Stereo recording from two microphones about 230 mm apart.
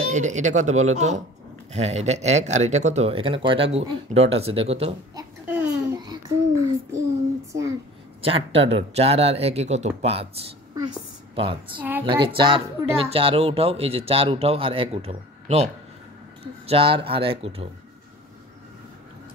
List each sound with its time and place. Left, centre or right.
0.1 s speech: right
5.1 s a sound: centre
8.2 s speech: right